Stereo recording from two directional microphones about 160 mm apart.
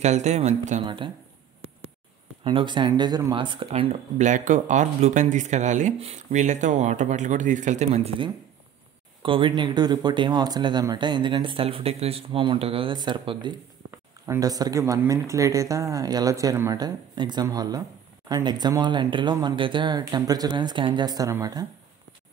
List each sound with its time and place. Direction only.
0.0 s speech: 45° right (ahead or behind)
0.8 s speech: 30° right (ahead or behind)
2.4 s speech: 30° right (ahead or behind); by 8.1 s 45° right (ahead or behind)
9.2 s speech: 30° right (ahead or behind)